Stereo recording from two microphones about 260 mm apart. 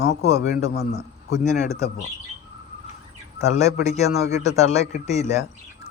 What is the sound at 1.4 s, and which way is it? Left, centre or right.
Speech, left.